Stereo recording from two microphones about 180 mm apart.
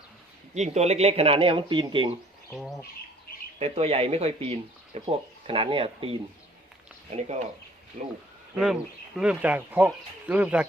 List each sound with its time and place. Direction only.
0.5 s speech: 40° right (ahead or behind)
3.6 s speech: 35° right (ahead or behind)
8.5 s speech: centre (ahead or behind)